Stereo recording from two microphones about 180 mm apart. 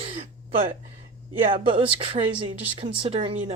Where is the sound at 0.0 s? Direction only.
30° right (ahead or behind).